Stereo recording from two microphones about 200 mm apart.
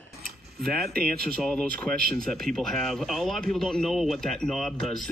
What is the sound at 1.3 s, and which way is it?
Speech, 5° left (ahead or behind).